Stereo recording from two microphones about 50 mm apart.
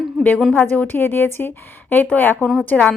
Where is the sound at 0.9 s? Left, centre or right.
Left.